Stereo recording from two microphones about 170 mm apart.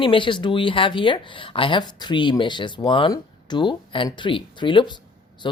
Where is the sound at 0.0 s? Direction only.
30° left (ahead or behind).